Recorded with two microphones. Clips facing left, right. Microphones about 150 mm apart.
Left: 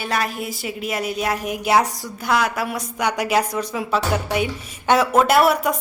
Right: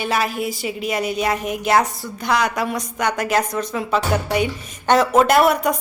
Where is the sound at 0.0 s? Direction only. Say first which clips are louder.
Right 3 dB; centre (ahead or behind).